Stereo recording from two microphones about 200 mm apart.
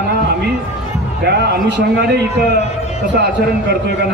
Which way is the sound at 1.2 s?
55° right (ahead or behind).